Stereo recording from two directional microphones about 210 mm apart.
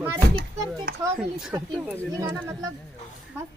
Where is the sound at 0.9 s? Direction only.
50° right (ahead or behind).